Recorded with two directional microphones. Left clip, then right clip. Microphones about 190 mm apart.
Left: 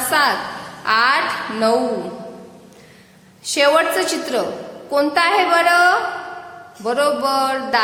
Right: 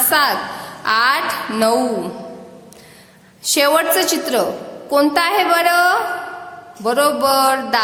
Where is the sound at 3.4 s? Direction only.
25° right (ahead or behind).